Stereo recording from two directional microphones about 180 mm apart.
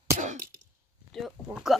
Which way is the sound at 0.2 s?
40° right (ahead or behind).